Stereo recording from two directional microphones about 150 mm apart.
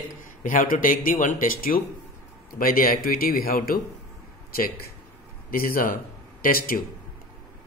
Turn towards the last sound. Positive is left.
turn(degrees=75)  # may be behind; listen again after turning